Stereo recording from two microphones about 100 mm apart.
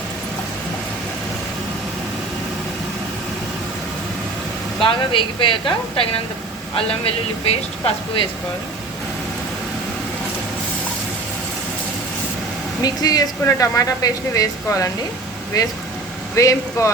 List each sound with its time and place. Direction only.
4.8 s a woman's voice: 55° left (ahead or behind)
6.7 s speech: 75° left (ahead or behind)
12.8 s speech: 40° left (ahead or behind)